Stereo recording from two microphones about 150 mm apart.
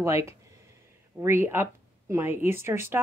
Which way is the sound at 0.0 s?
20° right (ahead or behind).